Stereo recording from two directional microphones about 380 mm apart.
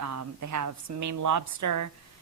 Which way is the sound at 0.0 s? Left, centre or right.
Right.